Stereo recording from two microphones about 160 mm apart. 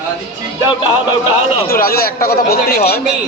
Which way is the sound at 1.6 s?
65° left (ahead or behind).